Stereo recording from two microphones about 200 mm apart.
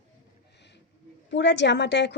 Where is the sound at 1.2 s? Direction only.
60° left (ahead or behind).